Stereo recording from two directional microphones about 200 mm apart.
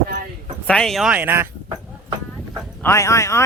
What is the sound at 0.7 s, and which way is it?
Speech, centre (ahead or behind).